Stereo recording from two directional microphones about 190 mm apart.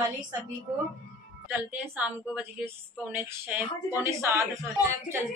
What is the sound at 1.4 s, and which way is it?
A woman's voice, 10° right (ahead or behind).